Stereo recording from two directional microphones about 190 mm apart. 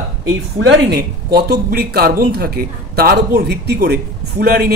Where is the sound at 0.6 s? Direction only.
65° right (ahead or behind).